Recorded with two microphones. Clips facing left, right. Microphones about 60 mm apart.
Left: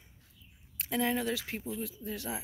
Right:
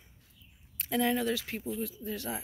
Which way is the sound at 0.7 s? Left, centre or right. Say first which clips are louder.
Right 2 dB; centre.